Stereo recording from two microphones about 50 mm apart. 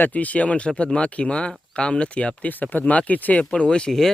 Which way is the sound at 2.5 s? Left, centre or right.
Left.